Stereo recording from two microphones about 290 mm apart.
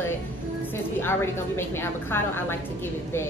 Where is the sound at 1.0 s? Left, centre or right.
Centre.